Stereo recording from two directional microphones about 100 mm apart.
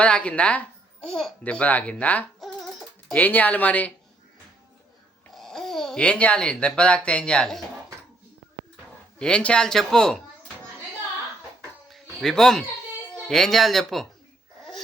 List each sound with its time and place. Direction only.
0.0 s speech: 10° left (ahead or behind)
1.0 s speech: centre (ahead or behind)
5.3 s speech: 5° left (ahead or behind)
9.1 s speech: 10° left (ahead or behind)
11.9 s a sound: centre (ahead or behind)
13.1 s speech: 5° left (ahead or behind)